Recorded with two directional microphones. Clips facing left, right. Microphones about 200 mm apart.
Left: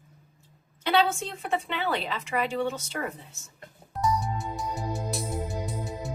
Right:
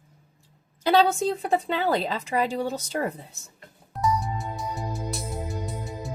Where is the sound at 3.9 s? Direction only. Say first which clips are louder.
Right 1 dB; centre (ahead or behind).